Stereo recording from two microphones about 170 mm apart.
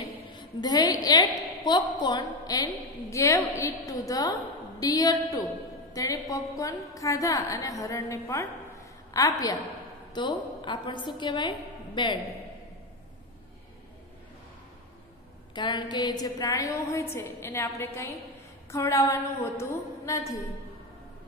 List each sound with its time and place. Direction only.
0.3 s a woman's voice: 25° left (ahead or behind)
15.5 s a woman's voice: 25° left (ahead or behind)